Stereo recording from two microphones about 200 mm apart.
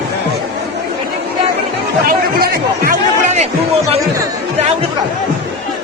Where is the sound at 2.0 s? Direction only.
50° right (ahead or behind).